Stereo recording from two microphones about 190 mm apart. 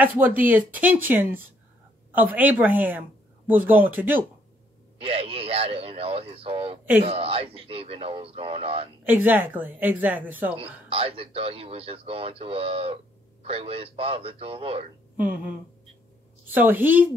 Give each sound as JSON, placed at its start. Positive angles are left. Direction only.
{"t": 0.0, "sound": "a woman's voice", "side_deg": -10}
{"t": 4.9, "sound": "a man's voice", "side_deg": -30}
{"t": 9.0, "sound": "a woman's voice", "side_deg": -10}
{"t": 10.5, "sound": "a man's voice", "side_deg": -30}
{"t": 15.1, "sound": "a woman's voice", "side_deg": -10}